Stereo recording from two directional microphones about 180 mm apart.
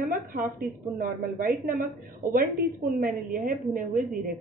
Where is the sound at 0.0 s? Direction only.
50° right (ahead or behind).